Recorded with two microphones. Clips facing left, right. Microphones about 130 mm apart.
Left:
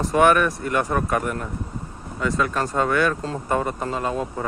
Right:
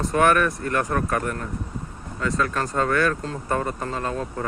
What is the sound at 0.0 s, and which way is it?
Speech, centre (ahead or behind).